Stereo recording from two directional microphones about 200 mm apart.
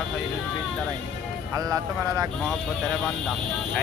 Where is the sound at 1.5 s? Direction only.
15° right (ahead or behind).